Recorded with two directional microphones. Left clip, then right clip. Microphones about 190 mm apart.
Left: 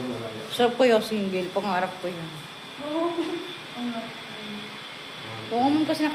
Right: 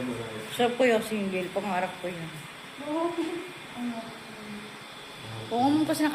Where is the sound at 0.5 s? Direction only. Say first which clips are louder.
Left 4 dB; 10° left (ahead or behind).